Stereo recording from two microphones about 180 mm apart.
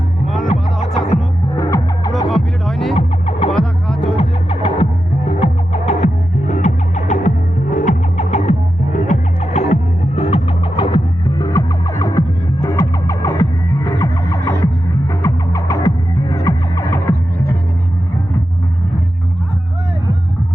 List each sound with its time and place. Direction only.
1.5 s music: 15° left (ahead or behind)
2.3 s music: centre (ahead or behind)
2.9 s music: 30° left (ahead or behind)
3.5 s music: 5° left (ahead or behind)
4.1 s music: 30° left (ahead or behind); by 17.2 s 15° left (ahead or behind)